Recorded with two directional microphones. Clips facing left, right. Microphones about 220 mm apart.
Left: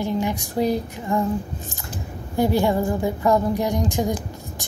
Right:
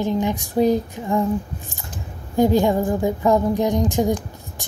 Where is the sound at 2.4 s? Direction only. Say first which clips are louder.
Right 3 dB; 15° right (ahead or behind).